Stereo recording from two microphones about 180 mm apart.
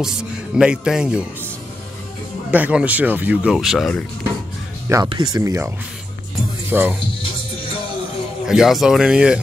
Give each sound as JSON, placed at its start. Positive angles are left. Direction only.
{"t": 0.0, "sound": "speech", "side_deg": -5}
{"t": 2.5, "sound": "speech", "side_deg": -10}
{"t": 4.8, "sound": "speech", "side_deg": -15}
{"t": 6.7, "sound": "speech", "side_deg": -10}
{"t": 8.5, "sound": "speech", "side_deg": 0}